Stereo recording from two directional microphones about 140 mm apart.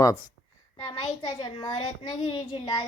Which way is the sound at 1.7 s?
45° left (ahead or behind).